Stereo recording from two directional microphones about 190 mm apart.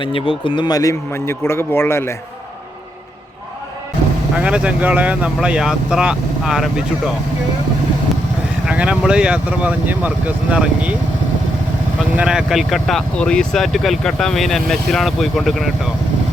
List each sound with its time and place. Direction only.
0.0 s speech: 25° left (ahead or behind)
4.4 s speech: 5° right (ahead or behind)
8.6 s speech: 5° right (ahead or behind)
12.1 s speech: 5° right (ahead or behind)